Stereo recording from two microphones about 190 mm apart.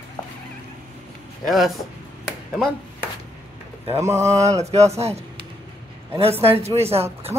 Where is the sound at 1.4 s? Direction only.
Centre (ahead or behind).